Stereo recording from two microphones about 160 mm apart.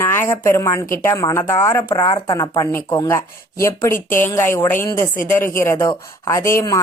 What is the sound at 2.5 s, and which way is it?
A woman's voice, 15° left (ahead or behind).